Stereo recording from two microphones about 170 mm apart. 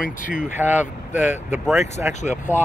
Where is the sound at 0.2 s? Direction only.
50° left (ahead or behind).